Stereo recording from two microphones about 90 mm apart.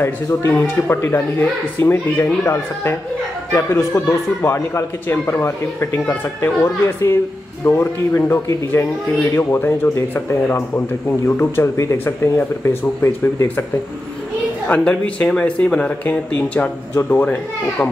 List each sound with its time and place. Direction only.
0.0 s speech: 25° left (ahead or behind)
14.7 s speech: 10° left (ahead or behind)